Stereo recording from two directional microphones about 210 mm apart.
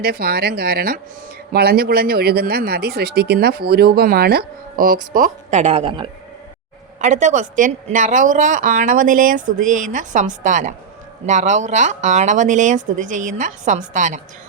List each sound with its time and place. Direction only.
0.0 s speech: 45° right (ahead or behind); by 6.1 s 25° right (ahead or behind)
7.0 s a woman's voice: 35° right (ahead or behind)